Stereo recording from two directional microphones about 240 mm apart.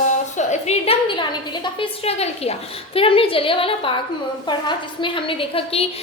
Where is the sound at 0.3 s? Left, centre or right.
Left.